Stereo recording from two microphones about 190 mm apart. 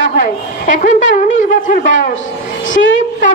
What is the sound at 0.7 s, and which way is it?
A woman's voice, 40° left (ahead or behind).